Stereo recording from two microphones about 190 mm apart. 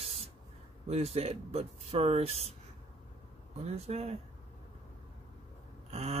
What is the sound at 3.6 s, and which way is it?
Speech, 35° right (ahead or behind).